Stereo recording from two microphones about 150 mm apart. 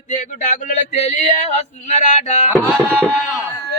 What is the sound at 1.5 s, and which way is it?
Speech, 55° left (ahead or behind).